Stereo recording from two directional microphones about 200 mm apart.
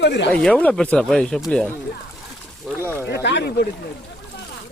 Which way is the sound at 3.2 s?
60° left (ahead or behind).